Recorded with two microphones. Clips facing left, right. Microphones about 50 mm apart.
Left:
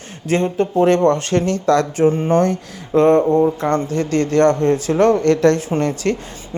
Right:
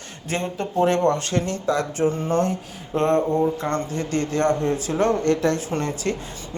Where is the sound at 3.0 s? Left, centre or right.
Left.